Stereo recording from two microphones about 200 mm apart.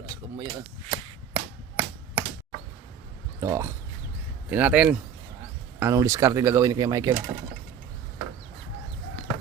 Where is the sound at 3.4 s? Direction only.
15° right (ahead or behind).